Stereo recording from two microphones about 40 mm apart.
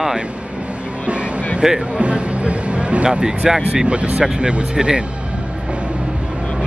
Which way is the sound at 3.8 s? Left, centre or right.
Right.